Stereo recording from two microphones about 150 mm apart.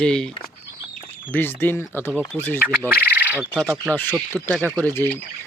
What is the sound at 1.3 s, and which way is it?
Speech, 15° left (ahead or behind).